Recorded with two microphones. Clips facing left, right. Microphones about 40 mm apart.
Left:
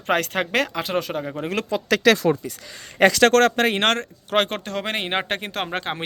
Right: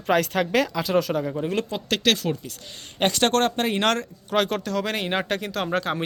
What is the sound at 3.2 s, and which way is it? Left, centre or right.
Speech, left.